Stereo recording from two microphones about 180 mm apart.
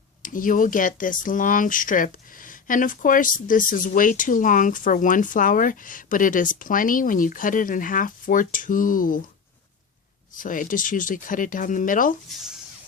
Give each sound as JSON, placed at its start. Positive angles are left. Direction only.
{"t": 0.2, "sound": "speech", "side_deg": 50}
{"t": 10.3, "sound": "speech", "side_deg": 50}
{"t": 12.3, "sound": "speech", "side_deg": 0}